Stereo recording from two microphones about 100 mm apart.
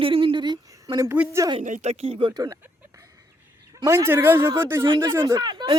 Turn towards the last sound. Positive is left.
turn(degrees=-45)  # may be behind; listen again after turning